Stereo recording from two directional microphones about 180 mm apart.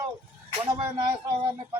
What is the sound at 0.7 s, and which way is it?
Speech, 30° right (ahead or behind).